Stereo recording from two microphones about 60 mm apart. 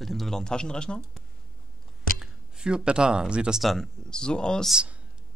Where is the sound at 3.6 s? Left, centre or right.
Centre.